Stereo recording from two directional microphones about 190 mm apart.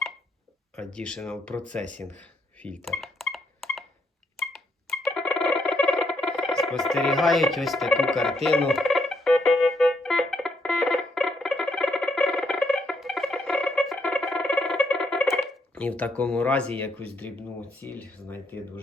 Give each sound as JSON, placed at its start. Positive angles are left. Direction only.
{"t": 0.9, "sound": "speech", "side_deg": 5}
{"t": 1.9, "sound": "a sound", "side_deg": 5}
{"t": 4.9, "sound": "music", "side_deg": 0}
{"t": 16.9, "sound": "speech", "side_deg": -30}
{"t": 17.2, "sound": "speech", "side_deg": 10}